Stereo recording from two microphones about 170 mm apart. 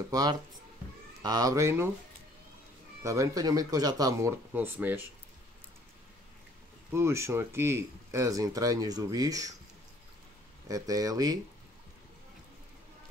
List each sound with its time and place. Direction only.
0.1 s speech: 20° right (ahead or behind)
3.0 s speech: 20° right (ahead or behind)
6.9 s speech: 15° right (ahead or behind)
10.7 s speech: 20° right (ahead or behind)